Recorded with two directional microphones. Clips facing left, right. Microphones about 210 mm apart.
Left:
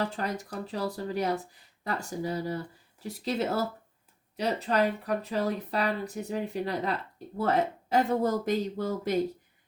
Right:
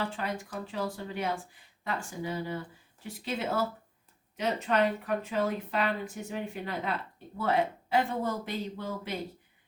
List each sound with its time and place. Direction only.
0.0 s speech: 40° left (ahead or behind)